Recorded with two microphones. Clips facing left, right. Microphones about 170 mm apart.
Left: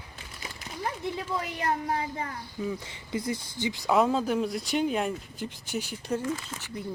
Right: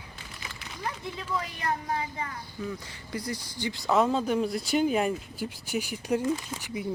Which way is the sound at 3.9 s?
Centre (ahead or behind).